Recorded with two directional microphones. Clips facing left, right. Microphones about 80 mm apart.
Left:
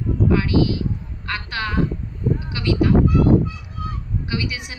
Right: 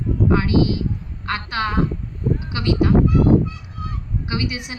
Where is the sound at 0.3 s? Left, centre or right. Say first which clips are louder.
Right 1 dB; right.